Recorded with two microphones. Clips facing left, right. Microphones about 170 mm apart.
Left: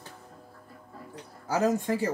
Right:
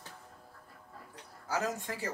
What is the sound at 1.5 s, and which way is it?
Speech, 30° left (ahead or behind).